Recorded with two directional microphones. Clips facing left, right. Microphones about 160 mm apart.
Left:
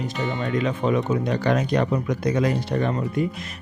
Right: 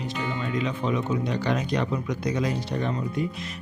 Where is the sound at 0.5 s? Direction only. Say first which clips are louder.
Left 5 dB; 50° left (ahead or behind).